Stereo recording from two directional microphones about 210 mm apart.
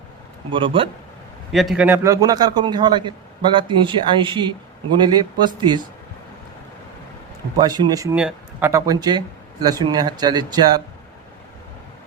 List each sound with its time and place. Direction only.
0.5 s speech: 25° right (ahead or behind)
1.5 s speech: centre (ahead or behind); by 5.8 s 20° right (ahead or behind)
7.6 s speech: 20° right (ahead or behind)